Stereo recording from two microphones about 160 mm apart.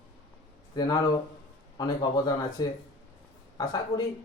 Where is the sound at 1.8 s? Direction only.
25° left (ahead or behind).